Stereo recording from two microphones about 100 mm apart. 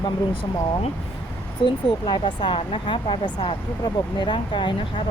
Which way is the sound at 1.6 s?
55° left (ahead or behind).